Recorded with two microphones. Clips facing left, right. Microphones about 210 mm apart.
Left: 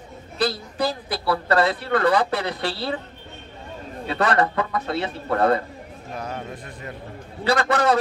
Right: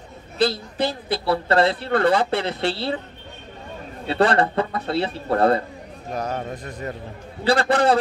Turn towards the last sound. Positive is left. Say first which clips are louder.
# right 2 dB
turn(degrees=-30)  # may be behind; listen again after turning